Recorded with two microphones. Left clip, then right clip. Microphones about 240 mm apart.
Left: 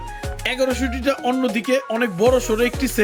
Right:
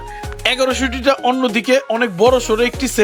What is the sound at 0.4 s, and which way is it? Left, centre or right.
Speech, centre.